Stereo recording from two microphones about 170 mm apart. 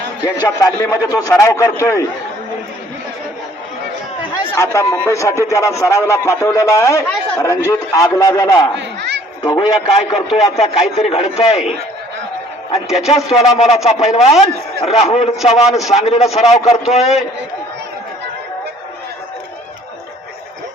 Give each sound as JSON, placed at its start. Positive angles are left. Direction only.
{"t": 0.2, "sound": "a man's voice", "side_deg": 25}
{"t": 4.5, "sound": "a man's voice", "side_deg": 15}
{"t": 8.8, "sound": "a sound", "side_deg": -90}
{"t": 9.4, "sound": "a man's voice", "side_deg": 30}
{"t": 13.1, "sound": "a man's voice", "side_deg": 40}